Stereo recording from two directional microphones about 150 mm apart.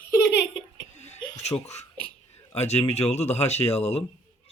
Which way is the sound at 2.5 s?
45° left (ahead or behind).